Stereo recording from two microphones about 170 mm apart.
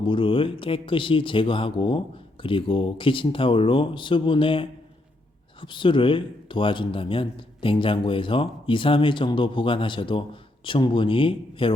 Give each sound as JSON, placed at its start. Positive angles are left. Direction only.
{"t": 0.0, "sound": "speech", "side_deg": 30}